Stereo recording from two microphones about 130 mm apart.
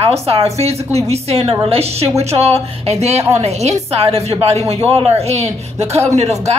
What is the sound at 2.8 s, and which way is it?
A woman's voice, 55° right (ahead or behind).